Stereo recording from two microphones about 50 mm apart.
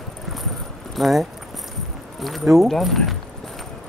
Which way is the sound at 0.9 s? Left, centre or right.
Centre.